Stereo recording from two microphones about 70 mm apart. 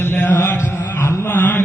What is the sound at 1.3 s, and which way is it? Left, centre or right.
Mantra, left.